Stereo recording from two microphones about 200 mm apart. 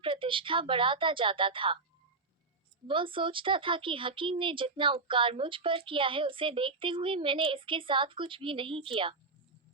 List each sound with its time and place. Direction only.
0.0 s speech: 25° right (ahead or behind)
2.8 s speech: 25° right (ahead or behind)